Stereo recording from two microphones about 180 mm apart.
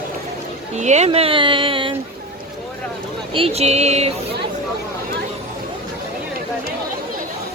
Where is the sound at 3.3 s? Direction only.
30° right (ahead or behind).